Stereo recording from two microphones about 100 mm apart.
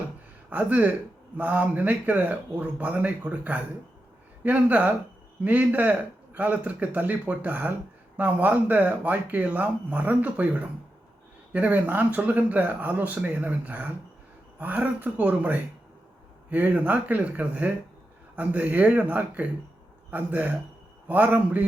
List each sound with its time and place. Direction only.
0.5 s a man's voice: 15° right (ahead or behind)